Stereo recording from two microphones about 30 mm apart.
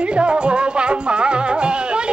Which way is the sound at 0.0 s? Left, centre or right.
Right.